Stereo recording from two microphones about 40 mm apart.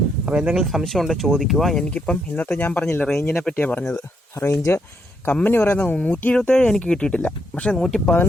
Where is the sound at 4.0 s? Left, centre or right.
Left.